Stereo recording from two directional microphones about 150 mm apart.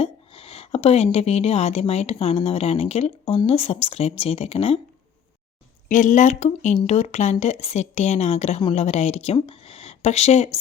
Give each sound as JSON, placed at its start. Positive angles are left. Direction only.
{"t": 0.0, "sound": "a woman's voice", "side_deg": 40}
{"t": 5.9, "sound": "a woman's voice", "side_deg": 55}